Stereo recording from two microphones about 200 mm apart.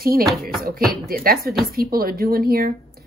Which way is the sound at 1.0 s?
45° right (ahead or behind).